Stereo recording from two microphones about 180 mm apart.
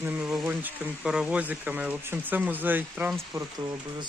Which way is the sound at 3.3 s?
20° right (ahead or behind).